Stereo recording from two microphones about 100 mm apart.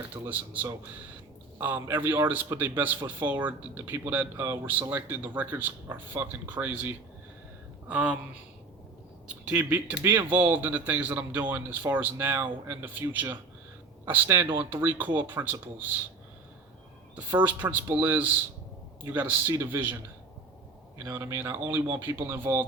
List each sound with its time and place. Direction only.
0.1 s a man's voice: 15° right (ahead or behind)
9.2 s a man's voice: 10° right (ahead or behind)
17.2 s a man's voice: 15° right (ahead or behind)
21.0 s a man's voice: 25° right (ahead or behind)